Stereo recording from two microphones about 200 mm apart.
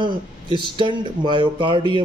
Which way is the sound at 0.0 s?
25° right (ahead or behind).